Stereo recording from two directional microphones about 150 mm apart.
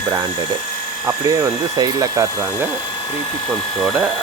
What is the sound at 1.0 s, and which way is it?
Speech, 25° right (ahead or behind).